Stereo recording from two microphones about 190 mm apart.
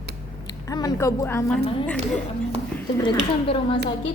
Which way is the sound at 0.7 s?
20° left (ahead or behind).